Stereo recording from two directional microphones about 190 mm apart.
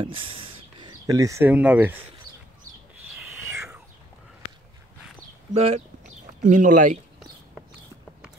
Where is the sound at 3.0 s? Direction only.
Centre (ahead or behind).